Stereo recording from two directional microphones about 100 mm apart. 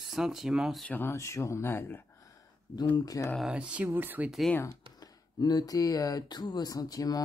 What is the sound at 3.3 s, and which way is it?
Speech, 5° right (ahead or behind).